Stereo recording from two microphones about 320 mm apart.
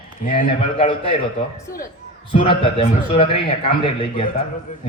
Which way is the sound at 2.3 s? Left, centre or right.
Centre.